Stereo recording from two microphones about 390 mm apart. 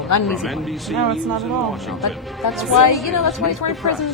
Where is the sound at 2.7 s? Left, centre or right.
Left.